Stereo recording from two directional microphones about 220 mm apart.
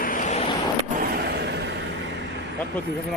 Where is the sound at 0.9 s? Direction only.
45° right (ahead or behind).